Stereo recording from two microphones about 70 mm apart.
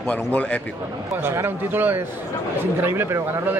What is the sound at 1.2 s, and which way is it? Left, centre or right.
A man's voice, right.